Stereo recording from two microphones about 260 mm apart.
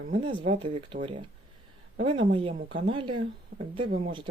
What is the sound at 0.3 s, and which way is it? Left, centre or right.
Speech, centre.